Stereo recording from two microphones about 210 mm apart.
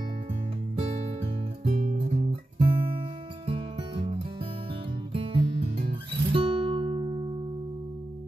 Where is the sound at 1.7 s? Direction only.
35° right (ahead or behind).